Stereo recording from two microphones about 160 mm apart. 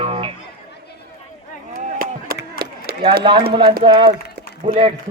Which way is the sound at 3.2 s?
30° right (ahead or behind).